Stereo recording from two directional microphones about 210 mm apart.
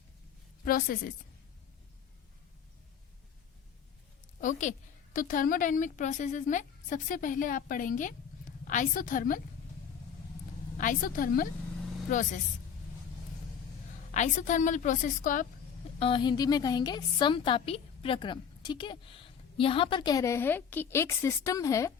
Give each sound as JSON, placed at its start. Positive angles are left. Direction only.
{"t": 0.6, "sound": "a woman's voice", "side_deg": 45}
{"t": 4.4, "sound": "a woman's voice", "side_deg": 35}
{"t": 10.8, "sound": "a woman's voice", "side_deg": 40}
{"t": 14.1, "sound": "a woman's voice", "side_deg": 35}
{"t": 16.0, "sound": "a woman's voice", "side_deg": 25}